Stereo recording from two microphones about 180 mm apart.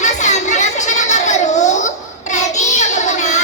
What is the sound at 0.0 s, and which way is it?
Children playing, 40° left (ahead or behind).